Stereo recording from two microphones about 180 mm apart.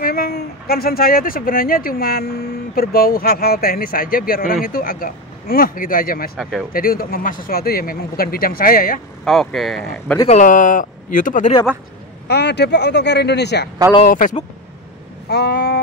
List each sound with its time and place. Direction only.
0.0 s speech: 55° left (ahead or behind)
6.3 s speech: centre (ahead or behind)
6.7 s speech: 55° left (ahead or behind)
9.2 s speech: centre (ahead or behind)
10.2 s speech: 40° left (ahead or behind)
12.3 s speech: 70° left (ahead or behind)
15.2 s speech: 65° left (ahead or behind)